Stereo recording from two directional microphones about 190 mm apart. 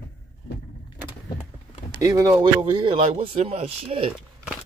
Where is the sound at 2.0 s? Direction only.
15° right (ahead or behind).